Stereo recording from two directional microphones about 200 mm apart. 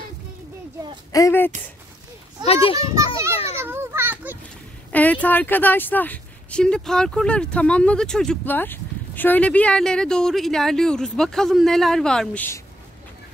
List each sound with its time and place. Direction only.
1.1 s speech: 15° left (ahead or behind)
2.4 s a child's voice: 30° left (ahead or behind)
3.5 s children playing: 10° right (ahead or behind)
4.9 s speech: 10° left (ahead or behind)